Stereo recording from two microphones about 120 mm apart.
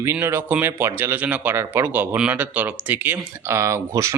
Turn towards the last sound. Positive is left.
turn(degrees=-25)  # may be behind; listen again after turning